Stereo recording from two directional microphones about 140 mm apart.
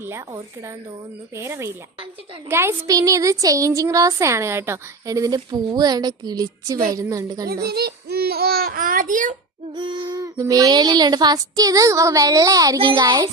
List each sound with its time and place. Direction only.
1.4 s a woman's voice: 20° right (ahead or behind)
8.2 s speech: 90° right; by 9.3 s 70° right (ahead or behind)
9.7 s a woman's voice: 35° right (ahead or behind)
12.8 s speech: 35° right (ahead or behind)